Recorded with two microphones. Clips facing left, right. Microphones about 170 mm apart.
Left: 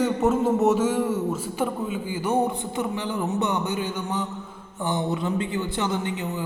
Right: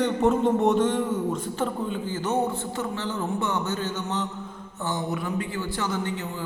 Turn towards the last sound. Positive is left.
turn(degrees=15)  # may be behind; listen again after turning